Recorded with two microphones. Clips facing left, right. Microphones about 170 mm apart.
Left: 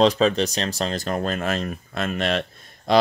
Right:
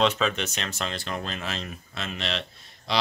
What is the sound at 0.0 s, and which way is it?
Speech, 35° left (ahead or behind).